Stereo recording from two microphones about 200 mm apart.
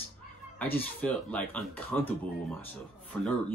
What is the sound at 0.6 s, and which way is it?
Speech, 10° left (ahead or behind).